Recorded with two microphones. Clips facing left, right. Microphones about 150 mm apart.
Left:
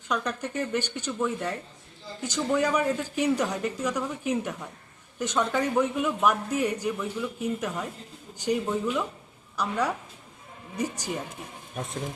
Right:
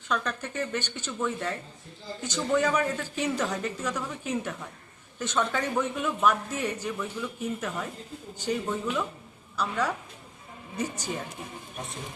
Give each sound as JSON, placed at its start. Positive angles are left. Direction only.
{"t": 0.1, "sound": "speech", "side_deg": 15}